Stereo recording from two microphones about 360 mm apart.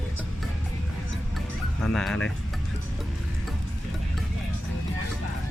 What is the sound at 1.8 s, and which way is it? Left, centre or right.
Speech, centre.